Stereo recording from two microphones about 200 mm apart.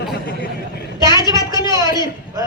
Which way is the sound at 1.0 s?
20° left (ahead or behind).